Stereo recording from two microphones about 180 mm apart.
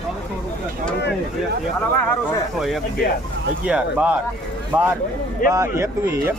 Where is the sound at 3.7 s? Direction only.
5° right (ahead or behind).